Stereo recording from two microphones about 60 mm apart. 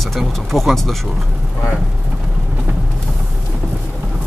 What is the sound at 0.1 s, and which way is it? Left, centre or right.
Speech, centre.